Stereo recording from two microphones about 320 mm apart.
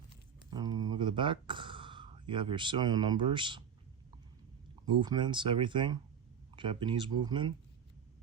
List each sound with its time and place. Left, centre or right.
0.5 s speech: centre
4.9 s speech: centre